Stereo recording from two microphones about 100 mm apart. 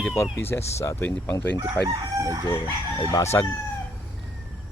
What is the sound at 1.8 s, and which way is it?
Crowing, 40° right (ahead or behind).